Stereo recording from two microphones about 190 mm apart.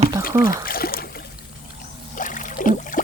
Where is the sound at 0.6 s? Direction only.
50° left (ahead or behind).